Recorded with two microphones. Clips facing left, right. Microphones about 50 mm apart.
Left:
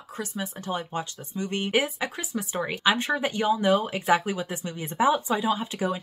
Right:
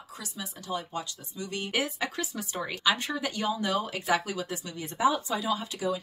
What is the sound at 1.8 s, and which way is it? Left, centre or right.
Speech, centre.